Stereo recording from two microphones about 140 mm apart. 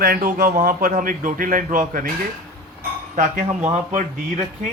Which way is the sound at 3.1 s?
70° right (ahead or behind).